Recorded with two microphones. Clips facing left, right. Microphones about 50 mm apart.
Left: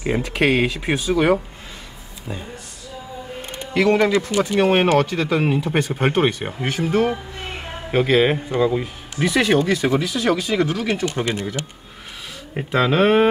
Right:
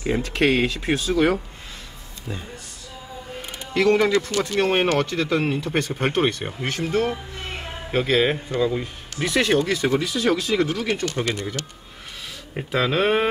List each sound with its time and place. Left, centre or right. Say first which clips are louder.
0.0 s speech: left 1 dB; centre
3.7 s speech: left 2 dB; centre
4.1 s speech: left 3 dB; centre
9.2 s speech: left 3 dB; centre
12.5 s speech: left 4 dB; centre